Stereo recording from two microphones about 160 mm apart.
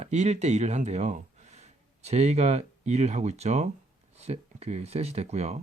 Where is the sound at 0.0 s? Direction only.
45° right (ahead or behind).